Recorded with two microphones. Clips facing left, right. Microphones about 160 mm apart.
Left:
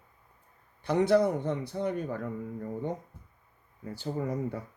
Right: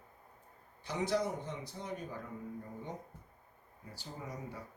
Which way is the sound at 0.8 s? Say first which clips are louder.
Left 10 dB; 60° left (ahead or behind).